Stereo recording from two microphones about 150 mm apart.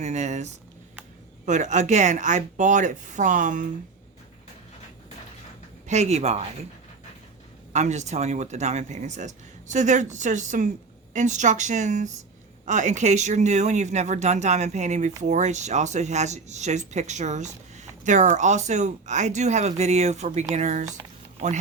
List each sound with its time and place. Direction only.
0.0 s speech: 50° right (ahead or behind)
5.9 s speech: 50° right (ahead or behind)
7.7 s speech: 50° right (ahead or behind)